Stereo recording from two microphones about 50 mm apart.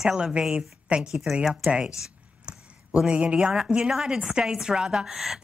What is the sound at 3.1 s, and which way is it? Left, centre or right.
Speech, right.